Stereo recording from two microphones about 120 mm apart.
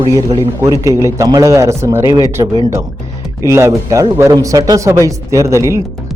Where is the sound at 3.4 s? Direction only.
25° right (ahead or behind).